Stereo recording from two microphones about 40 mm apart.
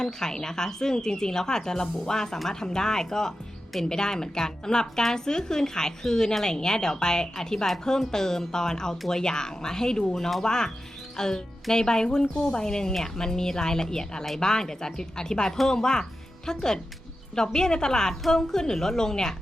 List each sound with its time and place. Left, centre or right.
0.0 s a woman's voice: centre
10.2 s speech: centre
10.4 s a woman's voice: centre